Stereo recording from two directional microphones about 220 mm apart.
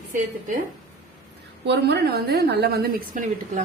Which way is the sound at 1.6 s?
50° right (ahead or behind).